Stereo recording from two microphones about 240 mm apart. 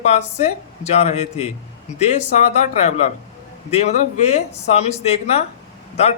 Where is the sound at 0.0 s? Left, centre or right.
Left.